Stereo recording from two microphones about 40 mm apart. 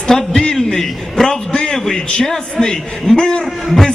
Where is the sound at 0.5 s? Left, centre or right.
Centre.